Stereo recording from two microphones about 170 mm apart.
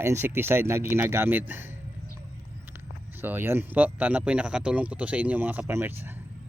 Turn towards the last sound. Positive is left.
turn(degrees=-10)  # may be behind; listen again after turning